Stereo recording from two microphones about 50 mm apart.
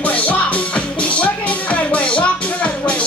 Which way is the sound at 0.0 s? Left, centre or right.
Left.